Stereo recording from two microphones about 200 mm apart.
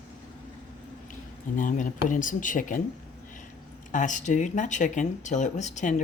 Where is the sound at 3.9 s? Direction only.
40° left (ahead or behind).